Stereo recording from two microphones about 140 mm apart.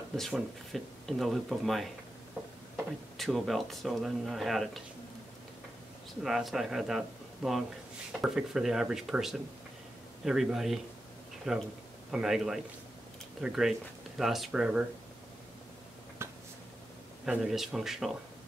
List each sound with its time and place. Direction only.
0.1 s speech: centre (ahead or behind)
3.2 s speech: centre (ahead or behind)
6.2 s speech: 5° right (ahead or behind)
16.2 s a sound: 20° right (ahead or behind)
17.2 s speech: 5° right (ahead or behind)